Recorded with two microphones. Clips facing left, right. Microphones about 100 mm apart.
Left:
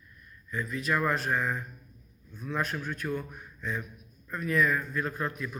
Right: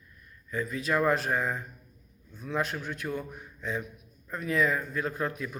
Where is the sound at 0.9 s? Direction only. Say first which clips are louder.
Right 2 dB; 30° right (ahead or behind).